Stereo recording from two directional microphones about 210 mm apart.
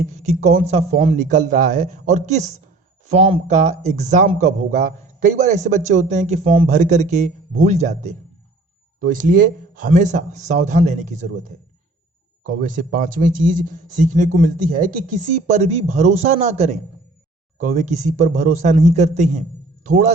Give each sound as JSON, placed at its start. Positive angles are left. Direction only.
{"t": 0.0, "sound": "a man's voice", "side_deg": -35}